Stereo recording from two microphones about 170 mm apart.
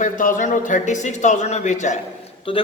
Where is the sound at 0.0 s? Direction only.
50° left (ahead or behind).